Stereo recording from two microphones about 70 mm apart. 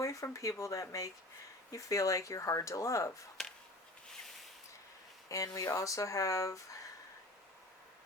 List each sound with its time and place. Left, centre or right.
0.0 s speech: left
3.4 s a sound: centre
5.3 s speech: left